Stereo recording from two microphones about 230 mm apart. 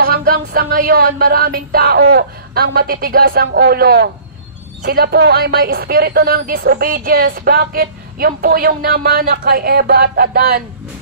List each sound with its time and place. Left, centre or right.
0.0 s a woman's voice: right